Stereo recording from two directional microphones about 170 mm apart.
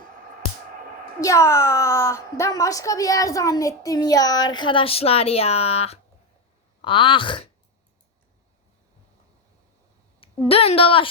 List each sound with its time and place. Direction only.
1.2 s speech: 20° left (ahead or behind)
10.5 s speech: 35° left (ahead or behind)